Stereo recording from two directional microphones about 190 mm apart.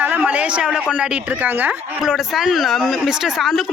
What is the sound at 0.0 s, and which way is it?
A man's voice, 10° right (ahead or behind).